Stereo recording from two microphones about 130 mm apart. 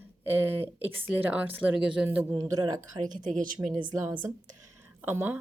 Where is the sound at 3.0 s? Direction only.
75° right (ahead or behind).